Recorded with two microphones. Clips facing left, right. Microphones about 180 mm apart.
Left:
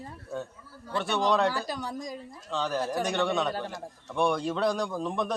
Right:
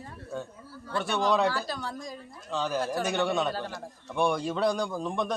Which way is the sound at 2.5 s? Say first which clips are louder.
Even; 5° right (ahead or behind).